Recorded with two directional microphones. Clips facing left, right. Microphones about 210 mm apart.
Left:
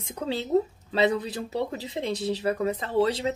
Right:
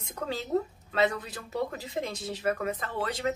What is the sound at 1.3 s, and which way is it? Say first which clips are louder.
Speech: left 4 dB; 30° left (ahead or behind).